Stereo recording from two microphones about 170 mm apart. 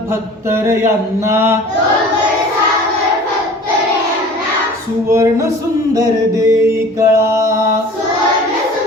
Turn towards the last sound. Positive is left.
turn(degrees=-20)  # may be behind; listen again after turning